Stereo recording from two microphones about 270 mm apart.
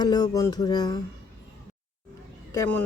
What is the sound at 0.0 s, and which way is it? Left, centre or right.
Speech, centre.